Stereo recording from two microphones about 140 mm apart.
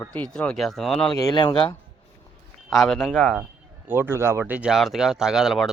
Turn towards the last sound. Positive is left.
turn(degrees=-5)  # may be behind; listen again after turning